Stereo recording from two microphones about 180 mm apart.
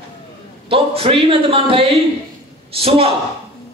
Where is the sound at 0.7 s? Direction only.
30° right (ahead or behind).